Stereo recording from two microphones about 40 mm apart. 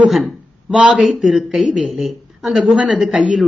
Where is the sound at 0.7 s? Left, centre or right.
Right.